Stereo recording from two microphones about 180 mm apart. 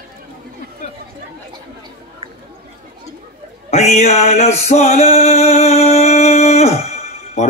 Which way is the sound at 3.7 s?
35° left (ahead or behind).